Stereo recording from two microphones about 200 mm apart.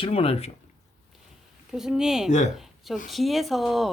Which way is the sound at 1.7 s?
Centre (ahead or behind).